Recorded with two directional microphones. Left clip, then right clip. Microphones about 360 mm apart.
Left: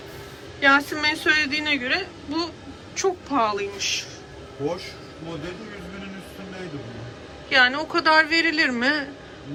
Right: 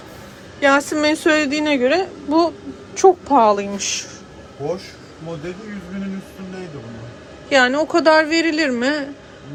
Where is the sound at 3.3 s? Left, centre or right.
Centre.